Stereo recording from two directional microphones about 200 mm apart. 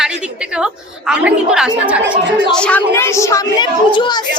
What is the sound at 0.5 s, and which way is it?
A woman's voice, 5° right (ahead or behind).